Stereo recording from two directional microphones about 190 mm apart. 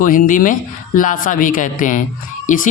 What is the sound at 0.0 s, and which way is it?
Speech, 45° left (ahead or behind).